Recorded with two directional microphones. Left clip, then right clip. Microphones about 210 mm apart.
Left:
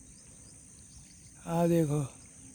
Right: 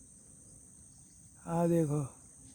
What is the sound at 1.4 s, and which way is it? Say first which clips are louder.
Speech: left 2 dB; 5° left (ahead or behind).